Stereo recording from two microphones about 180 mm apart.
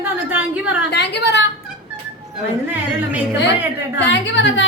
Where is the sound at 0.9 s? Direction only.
75° left (ahead or behind).